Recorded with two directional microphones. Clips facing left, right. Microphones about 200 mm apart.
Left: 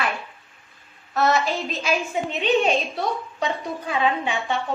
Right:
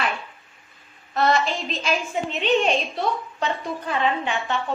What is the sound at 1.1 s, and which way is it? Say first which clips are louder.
Speech: even; 5° left (ahead or behind).